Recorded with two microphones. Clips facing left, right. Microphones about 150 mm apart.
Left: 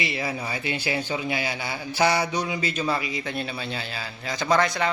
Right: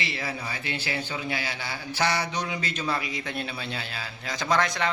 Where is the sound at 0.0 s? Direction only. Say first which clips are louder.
Left 4 dB; 15° left (ahead or behind).